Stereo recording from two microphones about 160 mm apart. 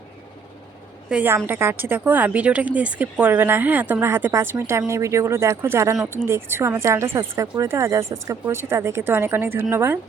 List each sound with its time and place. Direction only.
1.1 s speech: 10° right (ahead or behind)